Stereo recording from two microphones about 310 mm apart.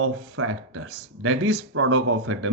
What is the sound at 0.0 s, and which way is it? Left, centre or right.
Speech, right.